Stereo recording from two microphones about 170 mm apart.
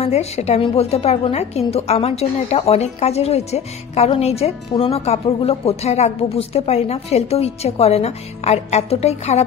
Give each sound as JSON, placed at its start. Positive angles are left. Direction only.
{"t": 0.0, "sound": "a woman's voice", "side_deg": 40}